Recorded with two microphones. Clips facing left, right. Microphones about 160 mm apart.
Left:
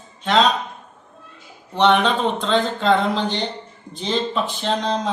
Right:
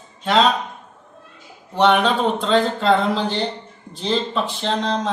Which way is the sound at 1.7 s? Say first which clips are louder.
Even; 5° right (ahead or behind).